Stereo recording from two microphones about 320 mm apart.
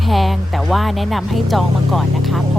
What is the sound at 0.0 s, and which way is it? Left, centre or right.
Speech, centre.